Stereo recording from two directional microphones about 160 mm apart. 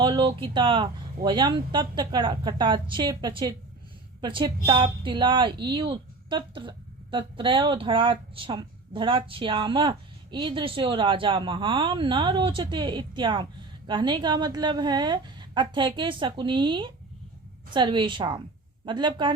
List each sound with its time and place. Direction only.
0.0 s a woman's voice: 30° right (ahead or behind)